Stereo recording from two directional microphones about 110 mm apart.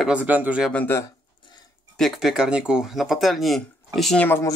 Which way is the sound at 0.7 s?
20° left (ahead or behind).